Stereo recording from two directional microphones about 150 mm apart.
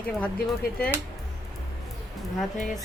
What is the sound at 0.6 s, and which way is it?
Speech, 80° left.